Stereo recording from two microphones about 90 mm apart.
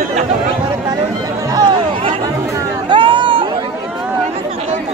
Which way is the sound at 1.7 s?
80° right.